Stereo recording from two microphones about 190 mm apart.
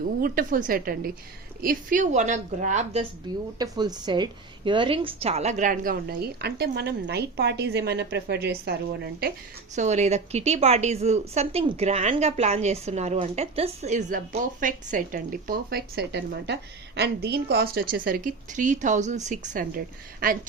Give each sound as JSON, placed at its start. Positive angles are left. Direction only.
{"t": 0.2, "sound": "a woman's voice", "side_deg": -45}
{"t": 3.6, "sound": "a woman's voice", "side_deg": -20}
{"t": 9.7, "sound": "a woman's voice", "side_deg": -40}